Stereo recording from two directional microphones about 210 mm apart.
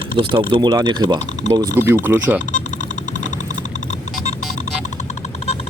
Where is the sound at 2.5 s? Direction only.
35° left (ahead or behind).